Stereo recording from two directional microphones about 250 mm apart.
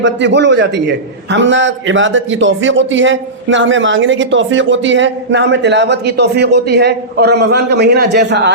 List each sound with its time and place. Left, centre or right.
0.0 s a man's voice: right